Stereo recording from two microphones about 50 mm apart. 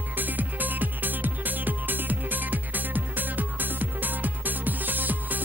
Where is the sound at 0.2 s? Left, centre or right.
Right.